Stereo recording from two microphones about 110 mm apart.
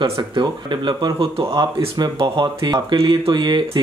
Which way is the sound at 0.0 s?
50° right (ahead or behind).